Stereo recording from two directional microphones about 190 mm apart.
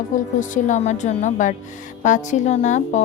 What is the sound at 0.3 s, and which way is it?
A woman's voice, 40° left (ahead or behind).